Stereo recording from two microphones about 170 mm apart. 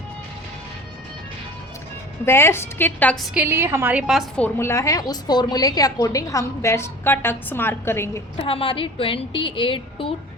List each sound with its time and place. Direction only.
2.2 s a woman's voice: 15° left (ahead or behind)
3.3 s a woman's voice: 10° right (ahead or behind)
4.4 s a woman's voice: 15° left (ahead or behind)
8.4 s a woman's voice: 30° left (ahead or behind)